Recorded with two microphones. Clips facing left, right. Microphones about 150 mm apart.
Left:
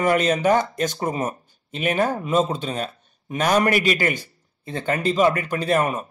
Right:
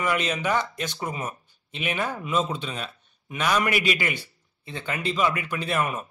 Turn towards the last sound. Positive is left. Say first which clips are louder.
# left 6 dB
turn(degrees=40)  # may be behind; listen again after turning